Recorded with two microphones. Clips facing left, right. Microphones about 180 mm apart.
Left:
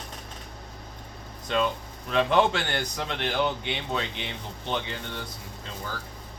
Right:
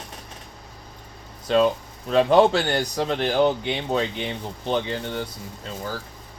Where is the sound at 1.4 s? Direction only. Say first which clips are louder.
Right 7 dB; 35° right (ahead or behind).